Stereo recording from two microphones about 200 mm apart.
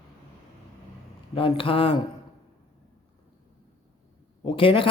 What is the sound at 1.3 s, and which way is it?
Speech, 25° left (ahead or behind).